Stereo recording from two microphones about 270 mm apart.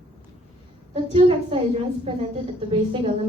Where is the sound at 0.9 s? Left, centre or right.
Right.